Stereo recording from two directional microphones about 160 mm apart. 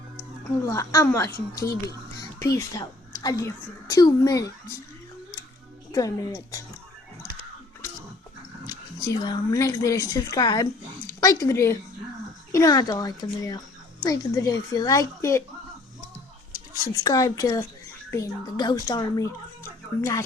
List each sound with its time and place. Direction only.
0.6 s speech: 20° left (ahead or behind)
5.9 s speech: 20° left (ahead or behind)
8.6 s speech: 25° left (ahead or behind)
16.7 s speech: 25° left (ahead or behind)